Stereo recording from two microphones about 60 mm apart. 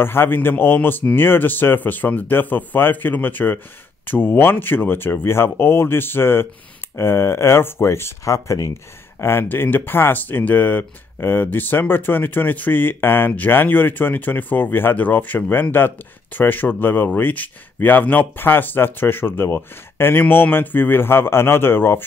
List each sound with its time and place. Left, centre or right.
0.0 s speech: left
9.2 s speech: left